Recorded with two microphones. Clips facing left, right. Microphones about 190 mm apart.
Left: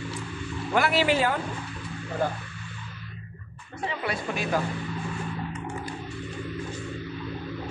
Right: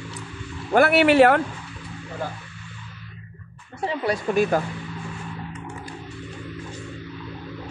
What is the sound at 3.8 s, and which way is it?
Speech, 40° right (ahead or behind).